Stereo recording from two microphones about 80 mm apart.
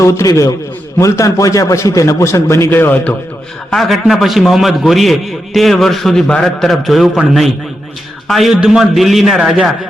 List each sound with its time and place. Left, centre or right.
0.0 s a man's voice: left
2.6 s a man's voice: left
3.7 s a man's voice: centre
8.3 s a man's voice: centre